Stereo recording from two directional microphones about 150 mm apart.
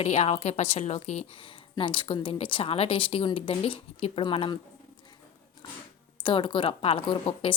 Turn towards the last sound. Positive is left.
turn(degrees=35)  # may be behind; listen again after turning